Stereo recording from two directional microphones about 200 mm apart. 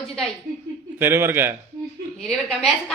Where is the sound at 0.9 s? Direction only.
10° right (ahead or behind).